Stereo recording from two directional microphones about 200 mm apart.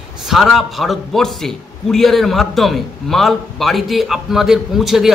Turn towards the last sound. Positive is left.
turn(degrees=0)  # may be behind; listen again after turning